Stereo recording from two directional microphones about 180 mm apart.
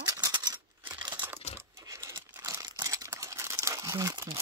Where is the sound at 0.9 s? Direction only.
25° right (ahead or behind).